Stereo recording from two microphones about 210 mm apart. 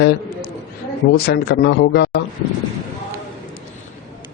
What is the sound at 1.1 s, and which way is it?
Speech, 50° left (ahead or behind).